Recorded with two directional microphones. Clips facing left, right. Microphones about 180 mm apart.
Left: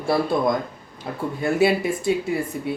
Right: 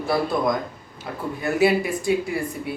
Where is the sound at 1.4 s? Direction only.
25° left (ahead or behind).